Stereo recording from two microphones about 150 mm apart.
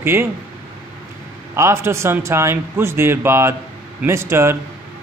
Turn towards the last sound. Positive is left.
turn(degrees=-15)  # may be behind; listen again after turning